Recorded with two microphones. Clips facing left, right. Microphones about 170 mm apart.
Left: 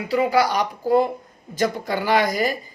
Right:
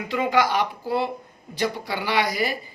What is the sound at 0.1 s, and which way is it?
Speech, 35° left (ahead or behind).